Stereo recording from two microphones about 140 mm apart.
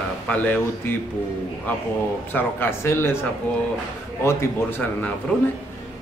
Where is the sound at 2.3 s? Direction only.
15° left (ahead or behind).